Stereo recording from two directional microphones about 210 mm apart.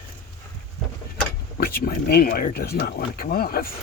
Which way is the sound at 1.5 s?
45° left (ahead or behind).